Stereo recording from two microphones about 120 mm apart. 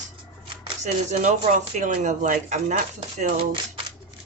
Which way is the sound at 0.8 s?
85° right.